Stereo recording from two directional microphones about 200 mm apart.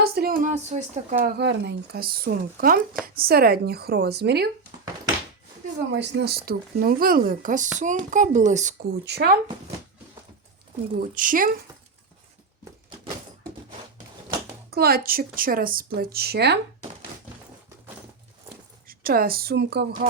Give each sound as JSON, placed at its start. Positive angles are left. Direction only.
{"t": 0.0, "sound": "speech", "side_deg": -50}
{"t": 1.2, "sound": "a woman's voice", "side_deg": -55}
{"t": 5.9, "sound": "a woman's voice", "side_deg": -60}
{"t": 8.9, "sound": "a woman's voice", "side_deg": -55}
{"t": 10.9, "sound": "a woman's voice", "side_deg": -40}
{"t": 14.7, "sound": "a woman's voice", "side_deg": -50}
{"t": 18.9, "sound": "a woman's voice", "side_deg": -45}